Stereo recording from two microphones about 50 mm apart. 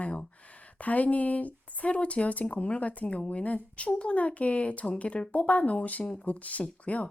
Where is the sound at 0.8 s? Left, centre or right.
Left.